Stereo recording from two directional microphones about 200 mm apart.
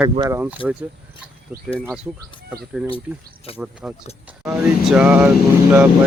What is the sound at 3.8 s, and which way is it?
Speech, 5° right (ahead or behind).